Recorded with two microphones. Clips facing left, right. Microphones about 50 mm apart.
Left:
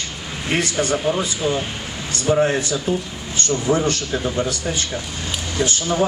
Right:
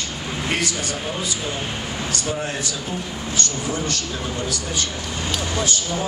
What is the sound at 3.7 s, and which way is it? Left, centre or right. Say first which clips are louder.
Speech: left 9 dB; left.